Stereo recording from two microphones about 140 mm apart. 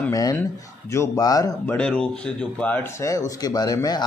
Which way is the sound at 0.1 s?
25° left (ahead or behind).